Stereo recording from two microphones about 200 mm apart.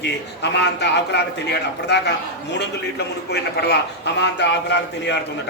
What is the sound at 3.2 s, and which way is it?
A man's voice, 55° left (ahead or behind).